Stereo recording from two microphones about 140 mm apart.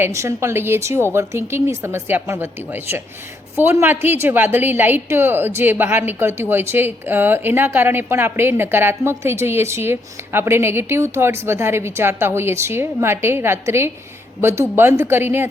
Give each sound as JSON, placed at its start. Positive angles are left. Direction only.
{"t": 0.0, "sound": "a woman's voice", "side_deg": -20}